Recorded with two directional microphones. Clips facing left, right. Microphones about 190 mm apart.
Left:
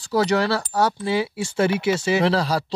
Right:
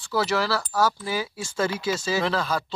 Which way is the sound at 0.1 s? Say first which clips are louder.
Left 4 dB; 30° left (ahead or behind).